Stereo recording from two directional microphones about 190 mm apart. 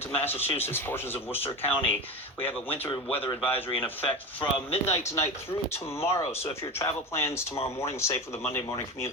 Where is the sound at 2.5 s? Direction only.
10° left (ahead or behind).